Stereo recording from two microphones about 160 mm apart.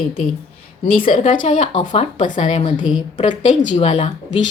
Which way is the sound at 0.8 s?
35° left (ahead or behind).